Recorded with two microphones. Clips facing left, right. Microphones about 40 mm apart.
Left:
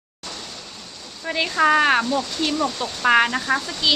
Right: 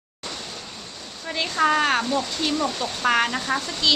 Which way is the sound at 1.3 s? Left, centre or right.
Centre.